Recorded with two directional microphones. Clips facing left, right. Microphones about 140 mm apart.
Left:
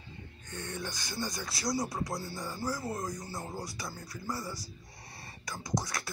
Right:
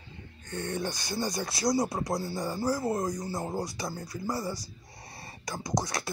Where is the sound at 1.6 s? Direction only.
40° right (ahead or behind).